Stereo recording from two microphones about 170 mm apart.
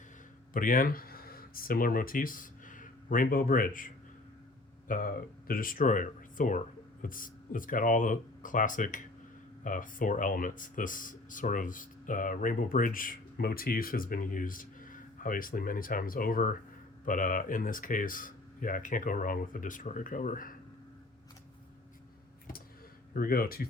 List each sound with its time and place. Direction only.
0.5 s speech: 55° left (ahead or behind)
23.1 s speech: 60° left (ahead or behind)